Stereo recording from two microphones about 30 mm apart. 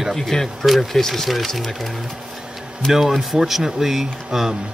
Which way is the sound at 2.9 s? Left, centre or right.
Centre.